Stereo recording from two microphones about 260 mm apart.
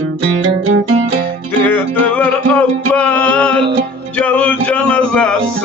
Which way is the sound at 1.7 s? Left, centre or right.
Centre.